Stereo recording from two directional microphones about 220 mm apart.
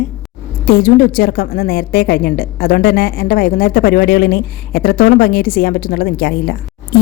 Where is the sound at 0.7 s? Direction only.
40° left (ahead or behind).